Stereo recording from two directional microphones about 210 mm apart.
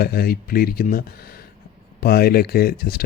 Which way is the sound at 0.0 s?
50° left (ahead or behind).